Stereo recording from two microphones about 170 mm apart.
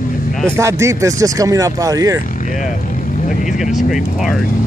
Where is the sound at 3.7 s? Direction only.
Centre (ahead or behind).